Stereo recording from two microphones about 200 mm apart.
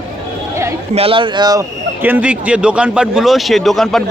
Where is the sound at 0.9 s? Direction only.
25° right (ahead or behind).